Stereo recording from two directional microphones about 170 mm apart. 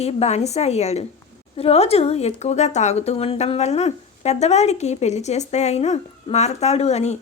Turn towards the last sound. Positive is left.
turn(degrees=40)  # may be behind; listen again after turning